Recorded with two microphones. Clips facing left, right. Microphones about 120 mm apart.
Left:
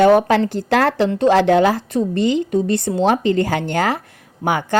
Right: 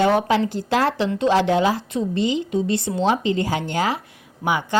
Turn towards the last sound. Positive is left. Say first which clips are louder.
# left 3 dB
turn(degrees=50)  # may be behind; listen again after turning